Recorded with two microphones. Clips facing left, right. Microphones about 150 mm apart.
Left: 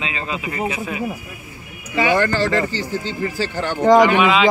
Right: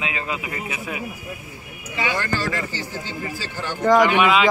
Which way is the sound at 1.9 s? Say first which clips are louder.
Left 8 dB; 55° left (ahead or behind).